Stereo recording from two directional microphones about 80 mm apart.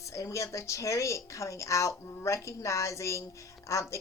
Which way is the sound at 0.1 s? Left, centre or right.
Left.